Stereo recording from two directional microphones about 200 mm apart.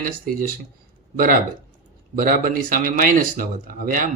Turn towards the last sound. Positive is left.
turn(degrees=-40)  # may be behind; listen again after turning